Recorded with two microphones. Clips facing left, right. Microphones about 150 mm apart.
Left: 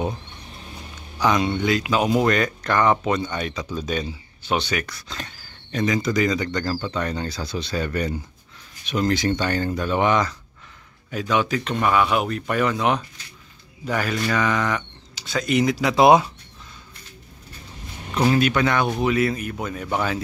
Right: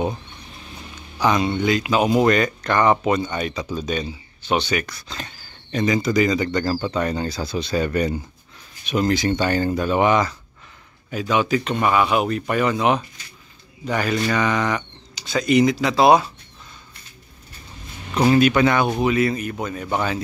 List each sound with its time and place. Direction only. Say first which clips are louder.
1.2 s speech: right 1 dB; centre (ahead or behind)
16.0 s speech: even; 20° left (ahead or behind)
18.2 s speech: right 4 dB; 5° right (ahead or behind)